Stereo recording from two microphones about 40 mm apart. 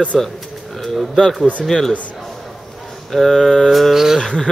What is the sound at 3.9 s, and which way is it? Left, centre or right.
Speech, centre.